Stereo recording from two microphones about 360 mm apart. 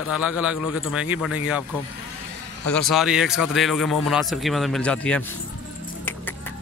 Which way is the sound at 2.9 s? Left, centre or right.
Centre.